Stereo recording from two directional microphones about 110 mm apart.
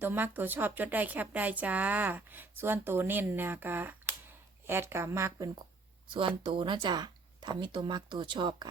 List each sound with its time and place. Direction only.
0.0 s speech: 20° right (ahead or behind)
6.1 s speech: 50° right (ahead or behind)